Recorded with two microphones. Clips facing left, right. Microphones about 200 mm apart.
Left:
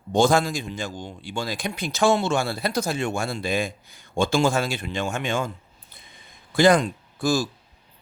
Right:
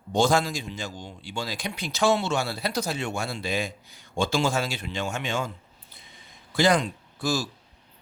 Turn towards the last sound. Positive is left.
turn(degrees=50)  # may be behind; listen again after turning